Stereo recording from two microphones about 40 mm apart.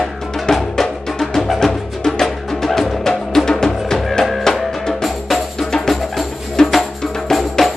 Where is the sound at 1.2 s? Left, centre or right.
Centre.